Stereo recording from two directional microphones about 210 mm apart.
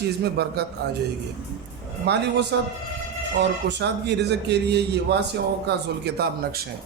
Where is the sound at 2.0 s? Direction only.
55° right (ahead or behind).